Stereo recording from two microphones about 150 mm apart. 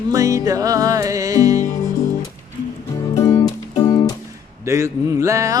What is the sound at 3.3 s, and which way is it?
Music, 35° left (ahead or behind).